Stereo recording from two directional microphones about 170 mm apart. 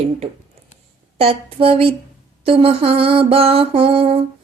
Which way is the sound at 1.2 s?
35° right (ahead or behind).